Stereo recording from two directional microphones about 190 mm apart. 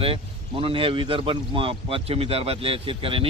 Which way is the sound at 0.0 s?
30° right (ahead or behind).